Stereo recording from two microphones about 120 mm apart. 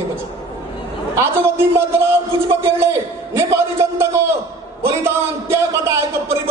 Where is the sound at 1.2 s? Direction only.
20° right (ahead or behind).